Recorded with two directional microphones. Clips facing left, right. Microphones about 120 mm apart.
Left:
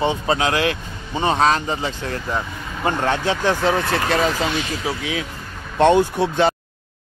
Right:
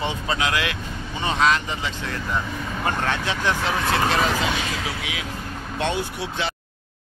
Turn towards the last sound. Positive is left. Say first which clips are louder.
# left 10 dB
turn(degrees=45)  # may be behind; listen again after turning